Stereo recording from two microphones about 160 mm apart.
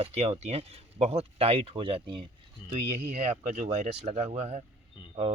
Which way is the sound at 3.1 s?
45° right (ahead or behind).